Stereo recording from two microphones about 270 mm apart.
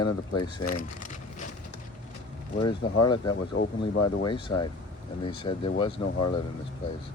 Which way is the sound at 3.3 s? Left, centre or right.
Left.